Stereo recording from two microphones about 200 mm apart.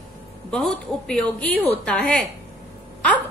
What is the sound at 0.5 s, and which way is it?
A woman's voice, 5° left (ahead or behind).